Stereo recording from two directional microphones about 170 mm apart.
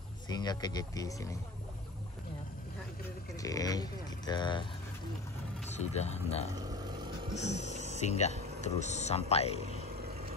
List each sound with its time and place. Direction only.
0.3 s speech: 25° left (ahead or behind)
3.3 s speech: 20° left (ahead or behind)
5.7 s speech: 40° left (ahead or behind)
7.7 s music: 40° right (ahead or behind)
8.0 s speech: 40° left (ahead or behind)